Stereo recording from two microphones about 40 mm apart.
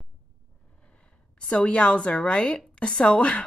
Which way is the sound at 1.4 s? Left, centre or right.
Left.